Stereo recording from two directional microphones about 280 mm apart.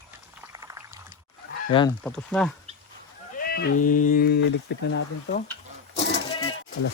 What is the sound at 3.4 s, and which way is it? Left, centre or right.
Speech, left.